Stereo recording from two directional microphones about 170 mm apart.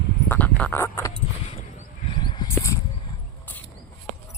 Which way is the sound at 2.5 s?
15° left (ahead or behind).